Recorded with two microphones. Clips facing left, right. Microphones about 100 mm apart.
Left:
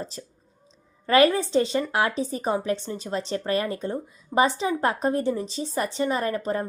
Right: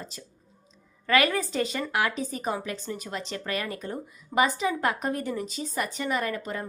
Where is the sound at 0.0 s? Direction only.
35° left (ahead or behind).